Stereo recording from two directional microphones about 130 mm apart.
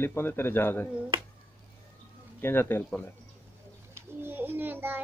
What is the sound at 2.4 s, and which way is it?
Speech, 15° left (ahead or behind).